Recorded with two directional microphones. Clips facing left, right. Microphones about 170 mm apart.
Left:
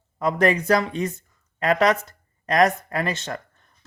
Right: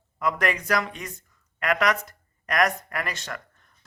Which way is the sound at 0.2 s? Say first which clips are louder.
Left 6 dB; 30° left (ahead or behind).